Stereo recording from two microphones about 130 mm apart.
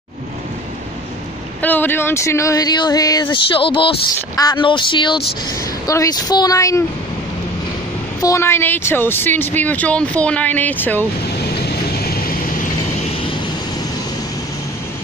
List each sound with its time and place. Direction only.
1.6 s speech: 15° left (ahead or behind)
8.2 s speech: 25° left (ahead or behind)